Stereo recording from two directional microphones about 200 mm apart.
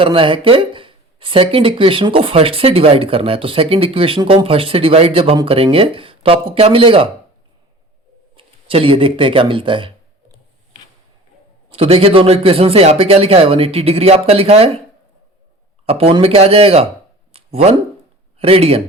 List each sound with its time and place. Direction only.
0.0 s speech: 25° right (ahead or behind)
8.4 s speech: 25° right (ahead or behind)
11.7 s speech: 30° right (ahead or behind)
15.9 s speech: 30° right (ahead or behind)
17.3 s a sound: 30° right (ahead or behind)
18.3 s speech: 30° right (ahead or behind)